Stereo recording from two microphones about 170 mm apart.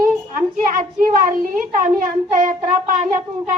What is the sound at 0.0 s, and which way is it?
A woman's voice, 50° right (ahead or behind).